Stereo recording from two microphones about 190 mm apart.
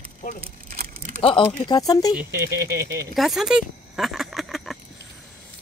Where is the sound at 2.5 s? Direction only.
55° right (ahead or behind).